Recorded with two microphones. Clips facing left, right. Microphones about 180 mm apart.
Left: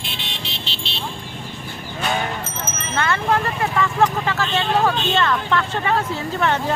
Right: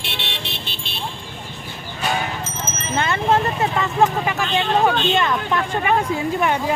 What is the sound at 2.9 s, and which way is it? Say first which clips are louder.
Speech: right 2 dB; 20° right (ahead or behind).